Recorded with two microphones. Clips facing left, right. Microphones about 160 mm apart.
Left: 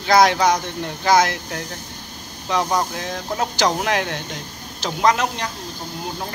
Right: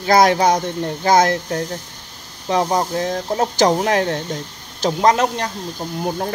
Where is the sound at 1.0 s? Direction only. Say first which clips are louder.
Right 2 dB; 50° right (ahead or behind).